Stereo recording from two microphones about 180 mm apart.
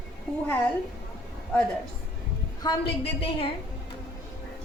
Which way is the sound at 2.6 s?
30° left (ahead or behind).